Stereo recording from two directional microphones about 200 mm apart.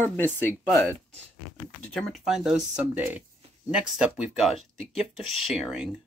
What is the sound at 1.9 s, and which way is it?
Speech, centre (ahead or behind).